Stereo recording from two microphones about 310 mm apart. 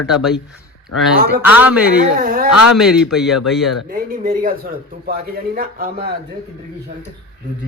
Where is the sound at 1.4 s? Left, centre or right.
Centre.